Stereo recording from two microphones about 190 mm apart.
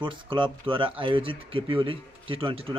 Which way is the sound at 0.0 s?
25° right (ahead or behind).